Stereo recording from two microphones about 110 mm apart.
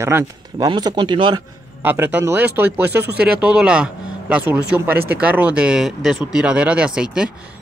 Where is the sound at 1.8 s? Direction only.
20° right (ahead or behind).